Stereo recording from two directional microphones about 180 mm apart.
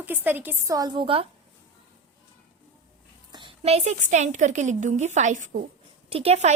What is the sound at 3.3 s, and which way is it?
A woman's voice, 30° right (ahead or behind).